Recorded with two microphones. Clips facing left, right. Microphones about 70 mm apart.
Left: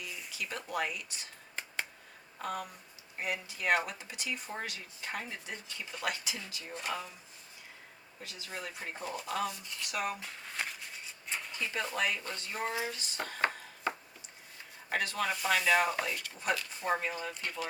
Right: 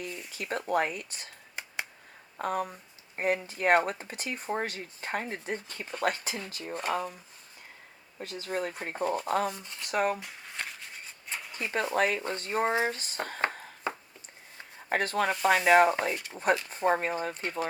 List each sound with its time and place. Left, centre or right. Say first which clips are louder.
0.3 s a sound: right 6 dB; right
0.7 s speech: right 8 dB; right
2.4 s speech: right 7 dB; right
8.2 s speech: right 10 dB; right
10.2 s a sound: even; centre
11.5 s speech: right 8 dB; right
14.8 s speech: right 5 dB; right
16.6 s speech: right 6 dB; right